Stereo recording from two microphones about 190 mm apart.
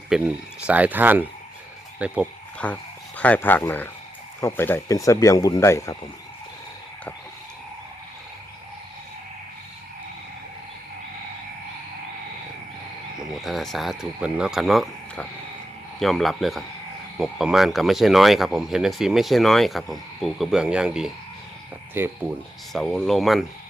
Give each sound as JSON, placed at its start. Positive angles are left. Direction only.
{"t": 0.1, "sound": "speech", "side_deg": -5}
{"t": 2.6, "sound": "speech", "side_deg": 5}
{"t": 13.1, "sound": "speech", "side_deg": 0}
{"t": 22.7, "sound": "speech", "side_deg": 0}